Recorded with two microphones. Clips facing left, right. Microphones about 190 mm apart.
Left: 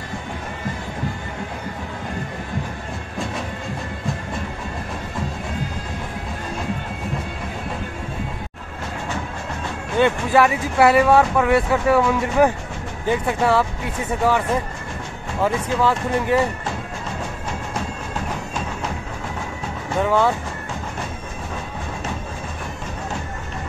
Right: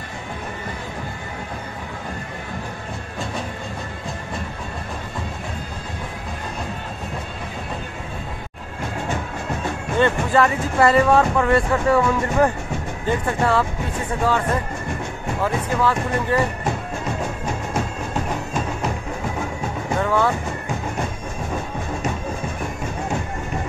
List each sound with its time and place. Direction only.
9.9 s speech: 10° left (ahead or behind)
20.0 s music: 15° left (ahead or behind)